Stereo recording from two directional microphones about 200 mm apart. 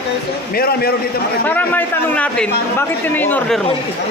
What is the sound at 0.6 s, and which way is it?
Speech, 50° left (ahead or behind).